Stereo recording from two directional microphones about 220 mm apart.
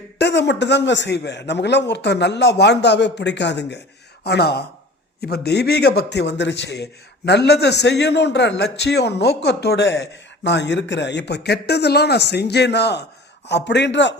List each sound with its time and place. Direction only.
0.2 s a man's voice: 50° left (ahead or behind)